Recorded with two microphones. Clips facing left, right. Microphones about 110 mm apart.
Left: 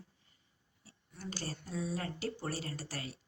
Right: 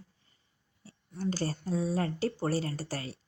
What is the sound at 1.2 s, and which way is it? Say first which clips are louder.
Speech: right 10 dB; 40° right (ahead or behind).